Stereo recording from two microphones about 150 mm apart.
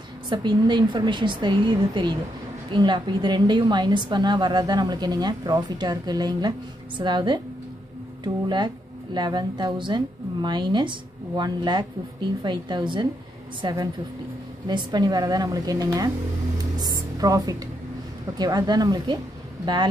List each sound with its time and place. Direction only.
0.3 s speech: 30° right (ahead or behind)
16.7 s music: 25° right (ahead or behind)
18.4 s speech: 25° right (ahead or behind)